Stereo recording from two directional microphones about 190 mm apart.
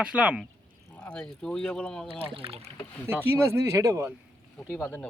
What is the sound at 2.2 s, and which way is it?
Speech, 30° right (ahead or behind).